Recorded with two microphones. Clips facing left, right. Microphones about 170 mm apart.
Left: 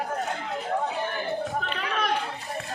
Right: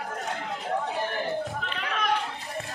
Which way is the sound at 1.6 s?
40° left (ahead or behind).